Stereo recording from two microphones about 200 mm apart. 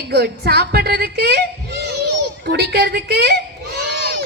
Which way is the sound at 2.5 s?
55° right (ahead or behind).